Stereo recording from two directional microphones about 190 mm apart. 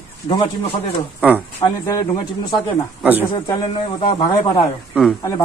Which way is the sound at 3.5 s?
20° left (ahead or behind).